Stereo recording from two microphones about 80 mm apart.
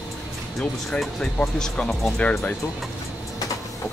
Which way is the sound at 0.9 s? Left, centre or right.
Centre.